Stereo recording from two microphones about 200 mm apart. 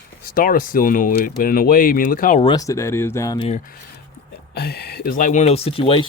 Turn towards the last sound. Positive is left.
turn(degrees=25)  # may be behind; listen again after turning